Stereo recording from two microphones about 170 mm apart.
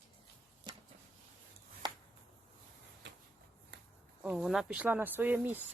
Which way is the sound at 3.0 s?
90° right.